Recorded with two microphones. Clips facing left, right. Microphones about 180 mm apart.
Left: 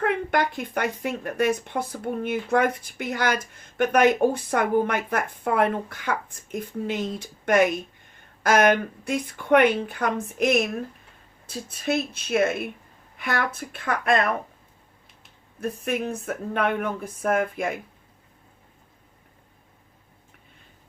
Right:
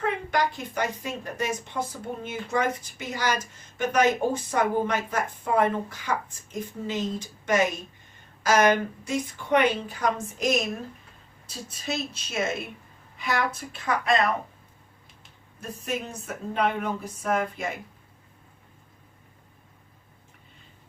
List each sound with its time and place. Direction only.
0.0 s speech: 55° left (ahead or behind)
15.6 s speech: 60° left (ahead or behind)